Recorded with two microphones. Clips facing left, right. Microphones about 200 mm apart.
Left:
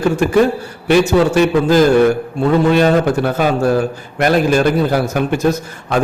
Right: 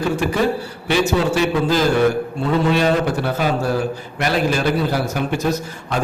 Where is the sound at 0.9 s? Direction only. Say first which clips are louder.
Left 6 dB; 50° left (ahead or behind).